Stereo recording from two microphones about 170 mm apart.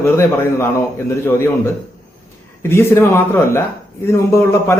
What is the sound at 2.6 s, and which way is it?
A man's voice, 15° left (ahead or behind).